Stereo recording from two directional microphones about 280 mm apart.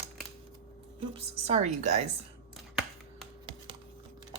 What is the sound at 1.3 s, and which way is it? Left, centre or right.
Speech, right.